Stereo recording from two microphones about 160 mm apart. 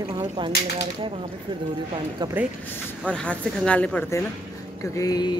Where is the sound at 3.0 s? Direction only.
5° left (ahead or behind).